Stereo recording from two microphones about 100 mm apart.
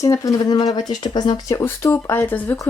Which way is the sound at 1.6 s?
25° left (ahead or behind).